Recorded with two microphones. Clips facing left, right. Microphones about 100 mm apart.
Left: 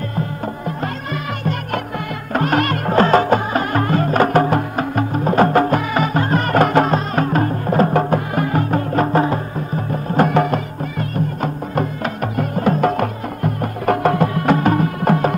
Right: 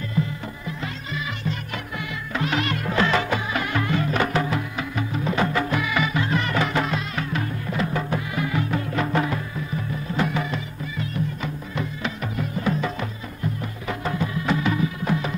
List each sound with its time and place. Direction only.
0.7 s music: 55° left (ahead or behind)
10.1 s music: 50° left (ahead or behind)